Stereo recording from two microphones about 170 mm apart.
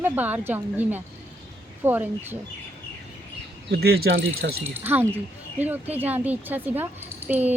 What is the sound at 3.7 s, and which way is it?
Speech, 70° right (ahead or behind).